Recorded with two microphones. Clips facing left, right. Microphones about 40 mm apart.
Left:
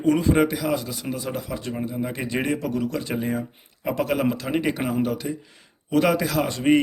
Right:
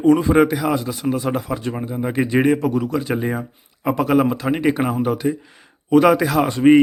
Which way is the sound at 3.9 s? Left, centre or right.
Centre.